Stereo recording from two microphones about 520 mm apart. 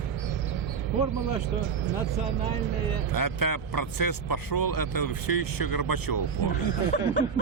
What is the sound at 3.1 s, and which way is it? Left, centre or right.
Speech, left.